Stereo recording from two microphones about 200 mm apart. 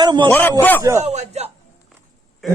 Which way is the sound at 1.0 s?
35° right (ahead or behind).